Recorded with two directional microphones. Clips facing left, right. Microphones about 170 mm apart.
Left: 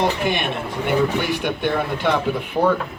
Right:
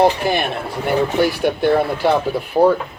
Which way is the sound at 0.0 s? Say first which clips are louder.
Right 5 dB; 35° right (ahead or behind).